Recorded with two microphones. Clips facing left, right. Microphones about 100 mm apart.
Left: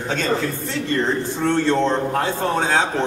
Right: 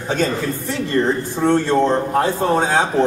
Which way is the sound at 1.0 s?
15° right (ahead or behind).